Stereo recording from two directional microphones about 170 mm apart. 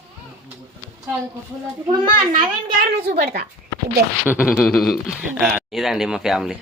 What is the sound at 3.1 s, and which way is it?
Speech, 60° right (ahead or behind).